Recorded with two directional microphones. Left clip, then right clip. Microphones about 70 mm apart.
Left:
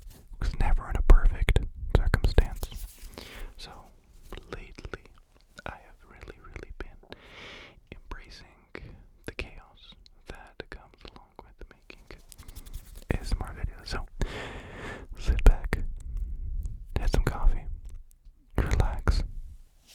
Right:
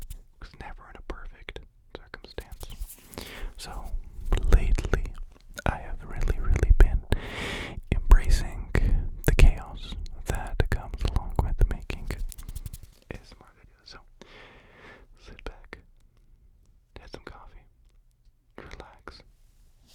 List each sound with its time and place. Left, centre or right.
0.3 s whispering: left
2.4 s whispering: left
3.1 s whispering: centre
4.3 s whispering: right
7.1 s a sound: right
8.2 s whispering: right
11.9 s whispering: right
13.0 s whispering: left
13.2 s whispering: left
14.2 s a sound: left
15.1 s whispering: left